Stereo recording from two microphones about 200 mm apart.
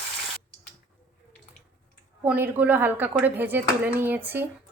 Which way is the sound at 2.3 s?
10° right (ahead or behind).